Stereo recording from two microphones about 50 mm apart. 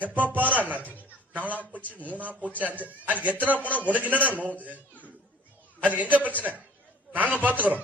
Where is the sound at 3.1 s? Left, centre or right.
Right.